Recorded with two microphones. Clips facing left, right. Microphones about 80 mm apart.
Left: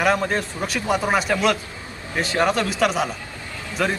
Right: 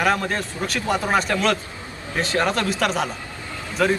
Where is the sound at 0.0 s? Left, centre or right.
Centre.